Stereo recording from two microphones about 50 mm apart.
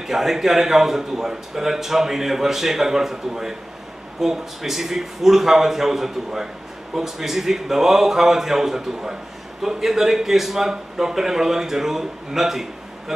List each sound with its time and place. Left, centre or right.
0.0 s a man's voice: centre